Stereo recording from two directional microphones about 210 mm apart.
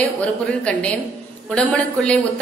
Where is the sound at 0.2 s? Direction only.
5° left (ahead or behind).